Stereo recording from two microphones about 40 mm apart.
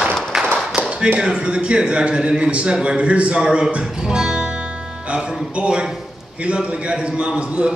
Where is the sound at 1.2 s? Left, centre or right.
Right.